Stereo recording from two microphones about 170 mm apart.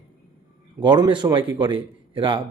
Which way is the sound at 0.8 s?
25° right (ahead or behind).